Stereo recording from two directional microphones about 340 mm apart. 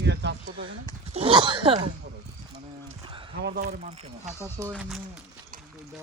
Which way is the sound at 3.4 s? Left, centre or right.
Right.